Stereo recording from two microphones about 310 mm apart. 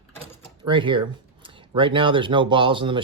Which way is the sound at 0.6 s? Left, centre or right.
Centre.